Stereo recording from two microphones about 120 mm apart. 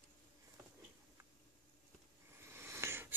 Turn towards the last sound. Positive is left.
turn(degrees=-20)  # may be behind; listen again after turning